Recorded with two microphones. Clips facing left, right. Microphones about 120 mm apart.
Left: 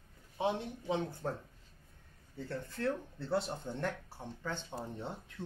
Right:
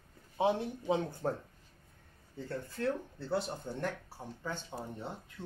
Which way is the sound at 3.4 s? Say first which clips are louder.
Even; 5° right (ahead or behind).